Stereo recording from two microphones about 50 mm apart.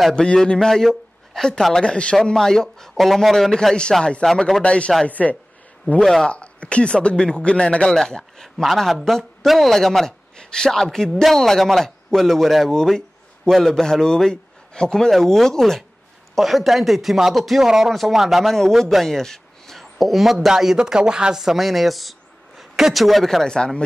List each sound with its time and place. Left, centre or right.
0.1 s speech: centre
2.3 s a man's voice: centre
4.6 s speech: left
5.9 s a man's voice: centre
6.3 s a man's voice: left; by 23.4 s centre
23.4 s a man's voice: centre